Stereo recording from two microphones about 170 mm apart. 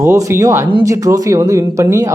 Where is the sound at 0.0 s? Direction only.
15° right (ahead or behind).